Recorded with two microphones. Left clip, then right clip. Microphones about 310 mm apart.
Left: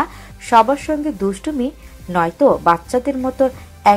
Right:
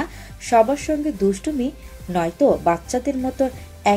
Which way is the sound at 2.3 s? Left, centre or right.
Left.